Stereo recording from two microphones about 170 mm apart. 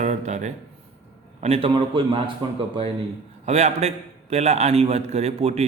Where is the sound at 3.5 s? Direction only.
40° right (ahead or behind).